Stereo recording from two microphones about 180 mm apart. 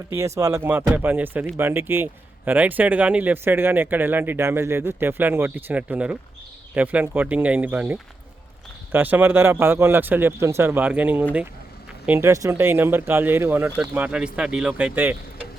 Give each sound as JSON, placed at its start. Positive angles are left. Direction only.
{"t": 0.1, "sound": "speech", "side_deg": -15}